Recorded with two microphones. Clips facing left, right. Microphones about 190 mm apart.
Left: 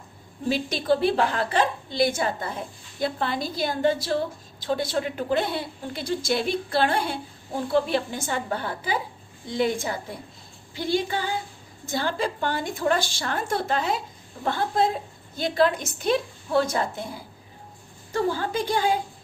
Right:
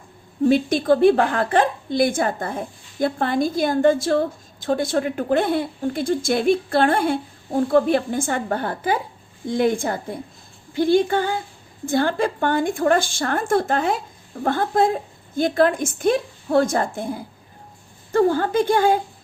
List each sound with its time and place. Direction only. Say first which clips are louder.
0.4 s a woman's voice: right 7 dB; 50° right (ahead or behind)